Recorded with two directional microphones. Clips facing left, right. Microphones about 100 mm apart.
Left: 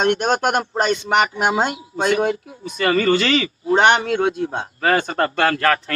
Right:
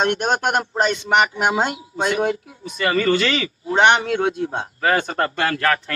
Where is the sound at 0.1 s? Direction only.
45° left (ahead or behind).